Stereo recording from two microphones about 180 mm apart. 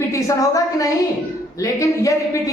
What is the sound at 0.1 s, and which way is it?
A woman's voice, 20° left (ahead or behind).